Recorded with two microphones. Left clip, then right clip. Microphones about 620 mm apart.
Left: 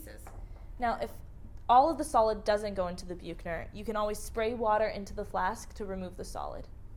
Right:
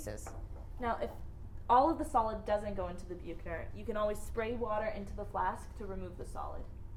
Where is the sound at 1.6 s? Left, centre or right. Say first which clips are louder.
Left 4 dB; left.